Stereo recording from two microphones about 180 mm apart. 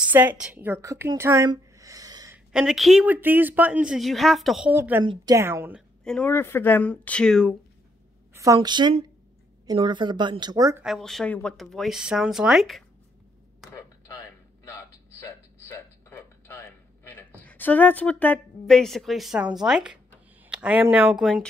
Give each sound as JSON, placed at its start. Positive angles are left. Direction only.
{"t": 0.0, "sound": "a woman's voice", "side_deg": -10}
{"t": 2.3, "sound": "a woman's voice", "side_deg": -5}
{"t": 5.0, "sound": "a woman's voice", "side_deg": -25}
{"t": 6.0, "sound": "speech", "side_deg": 5}
{"t": 8.3, "sound": "a sound", "side_deg": -15}
{"t": 8.5, "sound": "a woman's voice", "side_deg": -25}
{"t": 10.8, "sound": "speech", "side_deg": 0}
{"t": 14.7, "sound": "a sound", "side_deg": 15}
{"t": 17.4, "sound": "speech", "side_deg": 10}